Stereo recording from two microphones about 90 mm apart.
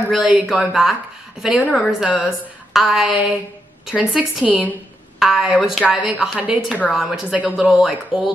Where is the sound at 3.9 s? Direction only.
10° right (ahead or behind).